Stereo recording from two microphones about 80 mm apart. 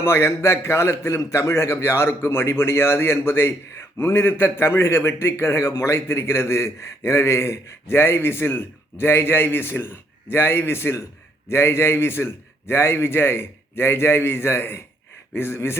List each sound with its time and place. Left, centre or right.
0.0 s a man's voice: left